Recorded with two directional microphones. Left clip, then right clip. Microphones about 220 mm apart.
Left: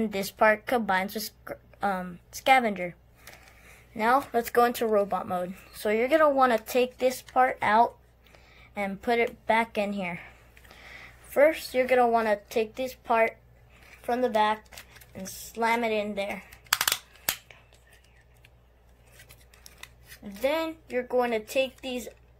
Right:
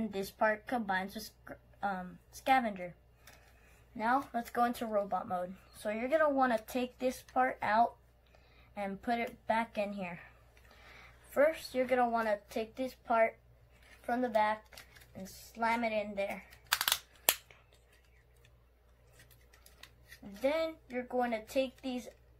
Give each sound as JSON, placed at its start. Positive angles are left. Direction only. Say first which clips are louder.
{"t": 0.0, "sound": "a woman's voice", "louder": "left 9 dB", "side_deg": 45}
{"t": 3.9, "sound": "speech", "louder": "left 9 dB", "side_deg": 45}
{"t": 11.3, "sound": "speech", "louder": "left 8 dB", "side_deg": 35}
{"t": 20.4, "sound": "speech", "louder": "left 5 dB", "side_deg": 35}